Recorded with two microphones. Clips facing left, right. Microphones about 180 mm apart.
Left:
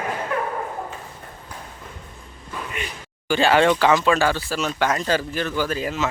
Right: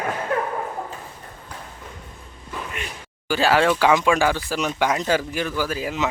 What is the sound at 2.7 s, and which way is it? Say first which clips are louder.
Speech: left 1 dB; centre (ahead or behind).